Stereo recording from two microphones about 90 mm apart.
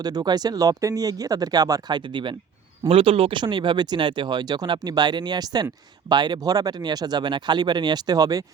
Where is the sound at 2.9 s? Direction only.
90° right.